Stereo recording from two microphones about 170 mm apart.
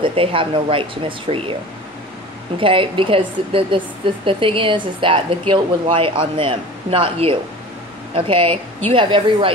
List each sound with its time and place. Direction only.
0.0 s speech: 30° right (ahead or behind)
2.6 s speech: 30° right (ahead or behind)